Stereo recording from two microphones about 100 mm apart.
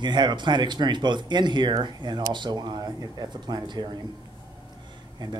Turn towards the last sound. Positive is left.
turn(degrees=-50)  # may be behind; listen again after turning